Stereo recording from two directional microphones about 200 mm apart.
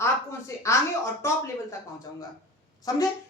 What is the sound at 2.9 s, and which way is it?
Speech, 20° left (ahead or behind).